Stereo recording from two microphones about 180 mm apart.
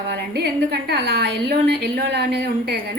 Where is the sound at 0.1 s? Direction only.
65° right (ahead or behind).